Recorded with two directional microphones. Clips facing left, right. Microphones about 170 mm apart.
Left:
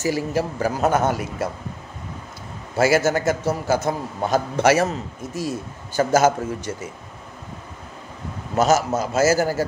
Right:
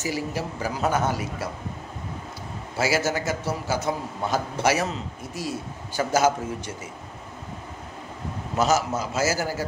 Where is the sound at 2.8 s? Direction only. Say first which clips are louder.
Left 6 dB; 50° left (ahead or behind).